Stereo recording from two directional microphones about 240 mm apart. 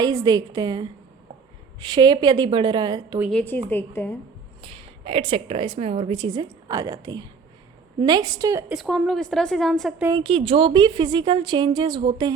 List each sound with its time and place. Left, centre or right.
0.0 s a woman's voice: centre
3.2 s a woman's voice: centre
4.6 s a woman's voice: right
8.7 s a woman's voice: centre
10.1 s a woman's voice: centre